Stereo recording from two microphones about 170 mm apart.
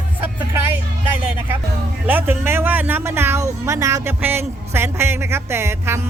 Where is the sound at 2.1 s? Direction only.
10° right (ahead or behind).